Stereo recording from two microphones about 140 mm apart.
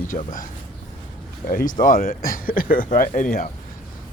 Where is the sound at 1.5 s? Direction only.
75° left (ahead or behind).